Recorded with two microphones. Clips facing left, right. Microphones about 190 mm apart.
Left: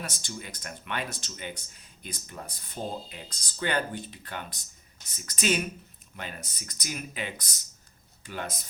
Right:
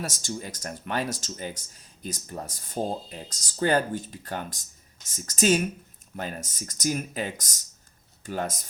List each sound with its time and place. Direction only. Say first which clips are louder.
0.2 s speech: right 6 dB; 40° right (ahead or behind)